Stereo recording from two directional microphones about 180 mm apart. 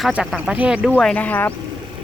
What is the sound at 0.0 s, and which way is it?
Speech, centre (ahead or behind).